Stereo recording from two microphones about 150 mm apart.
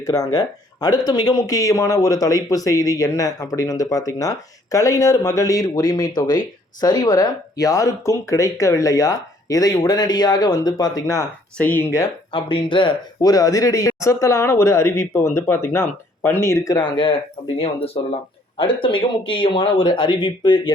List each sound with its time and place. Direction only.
0.0 s speech: 20° left (ahead or behind)
12.3 s speech: 35° left (ahead or behind)
17.6 s speech: 40° left (ahead or behind)